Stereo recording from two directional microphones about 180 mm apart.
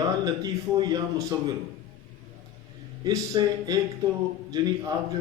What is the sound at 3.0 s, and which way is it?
A man's voice, 20° right (ahead or behind).